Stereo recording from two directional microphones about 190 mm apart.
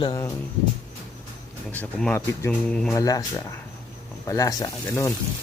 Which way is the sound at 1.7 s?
10° left (ahead or behind).